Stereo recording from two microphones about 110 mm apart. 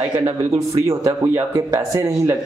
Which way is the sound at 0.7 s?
35° right (ahead or behind).